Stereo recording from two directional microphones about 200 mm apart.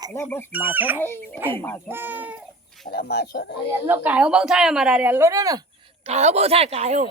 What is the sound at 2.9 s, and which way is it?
Speech, 55° left (ahead or behind).